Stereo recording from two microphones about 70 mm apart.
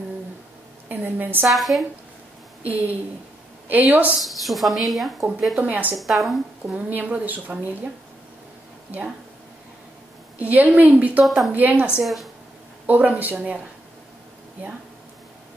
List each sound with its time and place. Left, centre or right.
0.8 s a sound: right
1.5 s speech: centre
2.6 s a woman's voice: right
4.2 s speech: centre
5.6 s a woman's voice: right
5.9 s speech: centre
6.6 s a woman's voice: right
10.4 s a woman's voice: right
11.2 s speech: centre
11.5 s a woman's voice: right
12.0 s speech: centre
12.8 s a woman's voice: right